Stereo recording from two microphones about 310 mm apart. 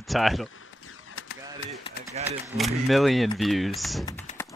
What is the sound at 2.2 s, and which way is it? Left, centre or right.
Speech, right.